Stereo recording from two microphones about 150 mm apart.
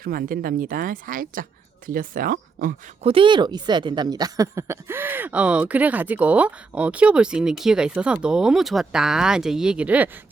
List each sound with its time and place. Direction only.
0.0 s speech: 85° right
3.0 s speech: 35° right (ahead or behind); by 10.1 s 10° right (ahead or behind)